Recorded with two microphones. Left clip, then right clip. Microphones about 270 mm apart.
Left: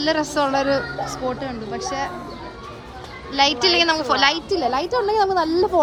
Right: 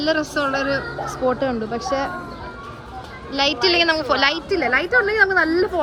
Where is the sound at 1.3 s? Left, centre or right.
Centre.